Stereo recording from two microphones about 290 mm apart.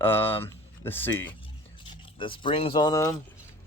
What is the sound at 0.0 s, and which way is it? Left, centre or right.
Speech, centre.